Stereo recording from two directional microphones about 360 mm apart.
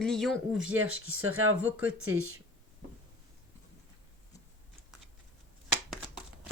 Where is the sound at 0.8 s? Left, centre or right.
Right.